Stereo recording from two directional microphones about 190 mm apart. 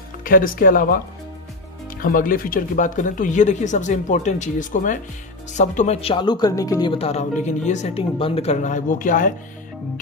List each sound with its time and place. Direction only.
0.2 s speech: 45° left (ahead or behind)